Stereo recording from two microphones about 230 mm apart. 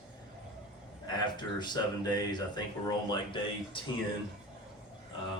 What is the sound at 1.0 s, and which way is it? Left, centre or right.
Speech, centre.